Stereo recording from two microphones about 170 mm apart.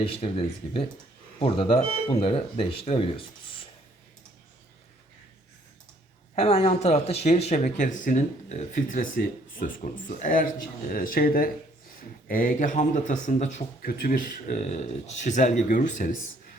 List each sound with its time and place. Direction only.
0.0 s speech: 35° left (ahead or behind)
6.3 s speech: 35° left (ahead or behind)
13.8 s speech: 55° left (ahead or behind)